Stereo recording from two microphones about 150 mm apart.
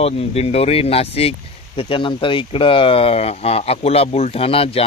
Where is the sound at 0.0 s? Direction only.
40° left (ahead or behind).